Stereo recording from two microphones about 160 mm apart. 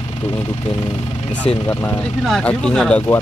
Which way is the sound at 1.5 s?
40° left (ahead or behind).